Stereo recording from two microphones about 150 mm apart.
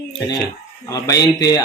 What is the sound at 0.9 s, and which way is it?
Speech, 25° left (ahead or behind).